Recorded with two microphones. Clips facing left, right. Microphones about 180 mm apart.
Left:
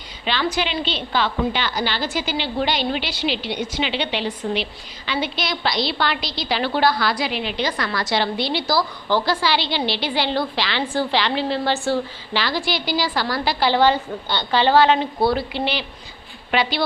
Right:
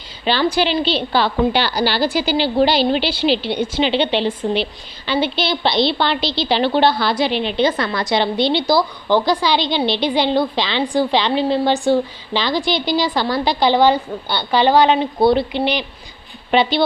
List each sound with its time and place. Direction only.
0.3 s a woman's voice: 35° right (ahead or behind)